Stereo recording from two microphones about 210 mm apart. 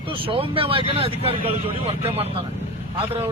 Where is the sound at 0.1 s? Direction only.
25° right (ahead or behind).